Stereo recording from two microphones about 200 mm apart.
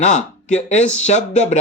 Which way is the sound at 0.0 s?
35° left (ahead or behind).